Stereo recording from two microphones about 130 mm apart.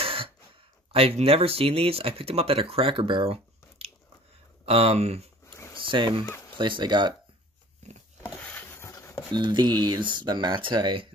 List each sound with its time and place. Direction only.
0.0 s throat clearing: 45° right (ahead or behind)
0.9 s speech: 50° right (ahead or behind)
5.4 s a sound: 25° left (ahead or behind)
5.8 s speech: 40° right (ahead or behind)
8.5 s a sound: 20° left (ahead or behind)
9.3 s speech: 35° right (ahead or behind)